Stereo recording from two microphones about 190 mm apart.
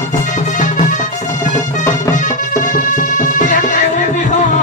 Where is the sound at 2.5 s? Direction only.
45° left (ahead or behind).